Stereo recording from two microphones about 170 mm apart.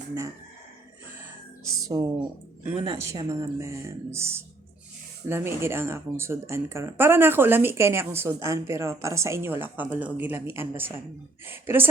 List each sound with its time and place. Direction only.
1.9 s speech: 25° right (ahead or behind)
3.0 s speech: 15° right (ahead or behind)